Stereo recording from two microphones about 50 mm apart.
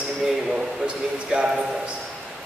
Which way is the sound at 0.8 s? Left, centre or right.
Right.